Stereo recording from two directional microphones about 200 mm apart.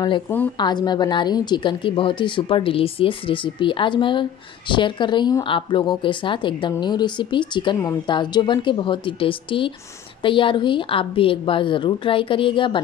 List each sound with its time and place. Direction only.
0.6 s a woman's voice: 20° left (ahead or behind)